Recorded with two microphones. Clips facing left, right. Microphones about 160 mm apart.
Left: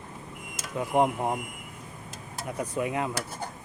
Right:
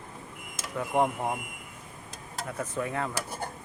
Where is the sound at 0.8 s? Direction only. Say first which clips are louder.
Left 2 dB; 15° left (ahead or behind).